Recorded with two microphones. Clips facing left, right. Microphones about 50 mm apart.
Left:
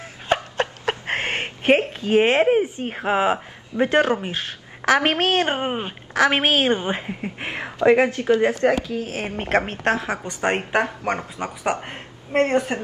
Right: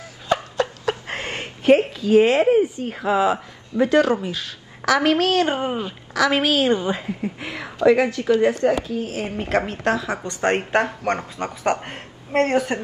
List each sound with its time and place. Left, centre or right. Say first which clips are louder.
0.3 s a woman's voice: right 1 dB; left
10.4 s speech: right 2 dB; centre